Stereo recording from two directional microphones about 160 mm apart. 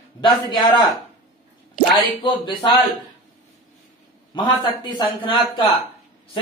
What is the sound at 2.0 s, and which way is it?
Speech, 30° left (ahead or behind).